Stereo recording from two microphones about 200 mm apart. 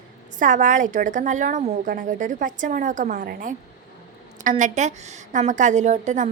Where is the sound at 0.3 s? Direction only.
40° right (ahead or behind).